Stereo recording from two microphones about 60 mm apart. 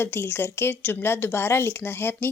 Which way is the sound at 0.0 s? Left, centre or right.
Left.